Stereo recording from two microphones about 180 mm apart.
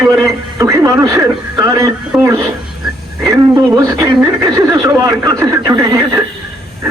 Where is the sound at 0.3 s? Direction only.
20° right (ahead or behind).